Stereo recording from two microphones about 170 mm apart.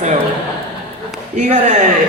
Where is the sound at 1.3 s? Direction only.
45° right (ahead or behind).